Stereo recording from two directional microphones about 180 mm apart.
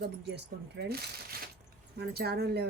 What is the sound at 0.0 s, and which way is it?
Speech, 70° right (ahead or behind).